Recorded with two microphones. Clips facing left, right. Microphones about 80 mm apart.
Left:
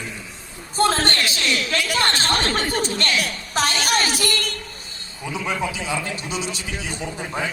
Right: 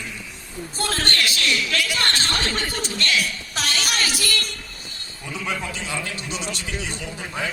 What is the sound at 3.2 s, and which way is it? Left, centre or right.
Speech, left.